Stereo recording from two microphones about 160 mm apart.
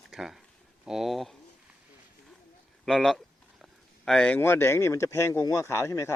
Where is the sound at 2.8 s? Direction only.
Centre (ahead or behind).